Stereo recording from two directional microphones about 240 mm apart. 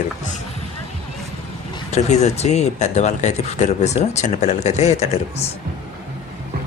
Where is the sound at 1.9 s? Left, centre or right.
Left.